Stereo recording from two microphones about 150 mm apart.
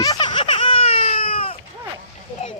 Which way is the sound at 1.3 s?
40° left (ahead or behind).